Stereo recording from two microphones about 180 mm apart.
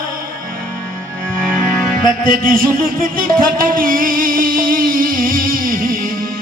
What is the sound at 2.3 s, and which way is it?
Music, 50° right (ahead or behind).